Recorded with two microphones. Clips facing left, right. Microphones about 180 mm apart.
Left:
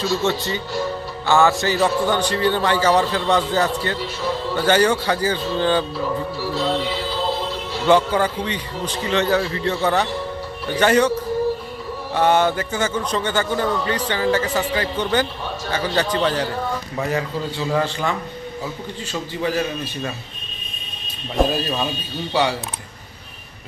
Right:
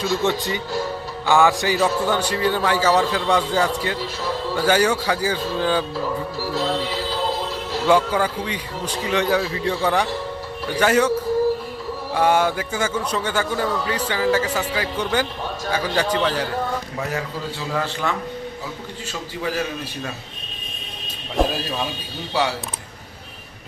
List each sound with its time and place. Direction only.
0.0 s a man's voice: 15° right (ahead or behind)
7.9 s a man's voice: 5° right (ahead or behind)
12.1 s a man's voice: 10° right (ahead or behind)
17.0 s a man's voice: 5° left (ahead or behind)
19.4 s a man's voice: 5° right (ahead or behind)
21.3 s a man's voice: centre (ahead or behind)